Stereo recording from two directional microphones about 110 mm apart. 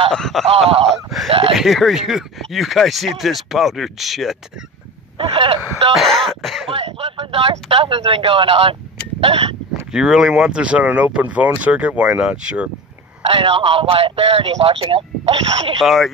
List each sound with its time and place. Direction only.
0.1 s speech: 5° left (ahead or behind)
0.5 s speech: 60° right (ahead or behind)
1.5 s speech: centre (ahead or behind)
5.2 s speech: 60° right (ahead or behind)
5.9 s speech: centre (ahead or behind)
6.7 s speech: 60° right (ahead or behind)
9.2 s hiccup: 55° right (ahead or behind)
9.9 s speech: 5° right (ahead or behind)
13.3 s speech: 50° right (ahead or behind)
15.8 s speech: centre (ahead or behind)